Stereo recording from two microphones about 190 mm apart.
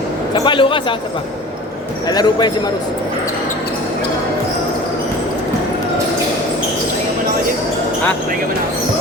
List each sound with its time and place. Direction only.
0.3 s speech: 25° left (ahead or behind)
2.0 s speech: 20° left (ahead or behind)